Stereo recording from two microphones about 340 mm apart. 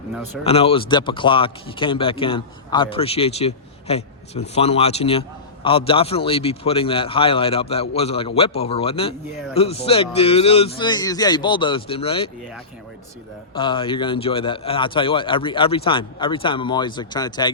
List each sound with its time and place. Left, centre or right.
0.4 s speech: centre
13.5 s speech: centre